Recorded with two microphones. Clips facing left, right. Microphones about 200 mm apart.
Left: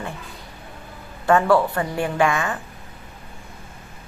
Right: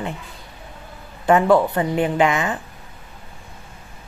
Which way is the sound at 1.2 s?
20° right (ahead or behind).